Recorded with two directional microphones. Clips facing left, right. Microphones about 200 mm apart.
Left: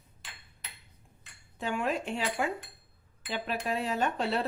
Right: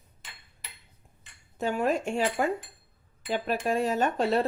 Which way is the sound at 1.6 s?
45° right (ahead or behind).